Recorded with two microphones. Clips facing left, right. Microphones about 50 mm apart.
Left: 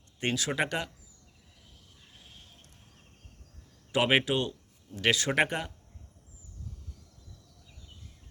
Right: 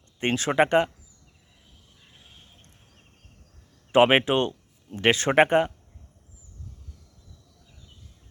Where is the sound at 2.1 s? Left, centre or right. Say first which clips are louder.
Right 1 dB; centre.